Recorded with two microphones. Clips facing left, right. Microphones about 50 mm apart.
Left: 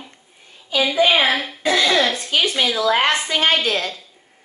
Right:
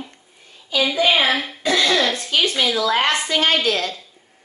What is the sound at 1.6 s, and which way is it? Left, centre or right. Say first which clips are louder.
Speech: left 2 dB; centre.